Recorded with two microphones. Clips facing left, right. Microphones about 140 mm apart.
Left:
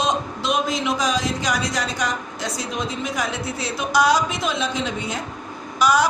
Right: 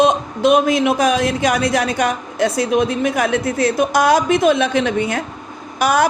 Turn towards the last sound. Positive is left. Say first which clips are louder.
# right 2 dB
turn(degrees=-55)  # may be behind; listen again after turning